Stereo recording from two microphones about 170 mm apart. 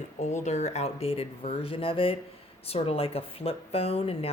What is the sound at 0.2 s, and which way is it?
A woman's voice, 40° left (ahead or behind).